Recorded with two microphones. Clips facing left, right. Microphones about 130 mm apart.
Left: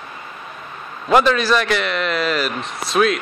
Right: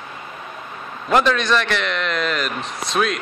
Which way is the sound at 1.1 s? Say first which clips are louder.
Left 2 dB; 5° left (ahead or behind).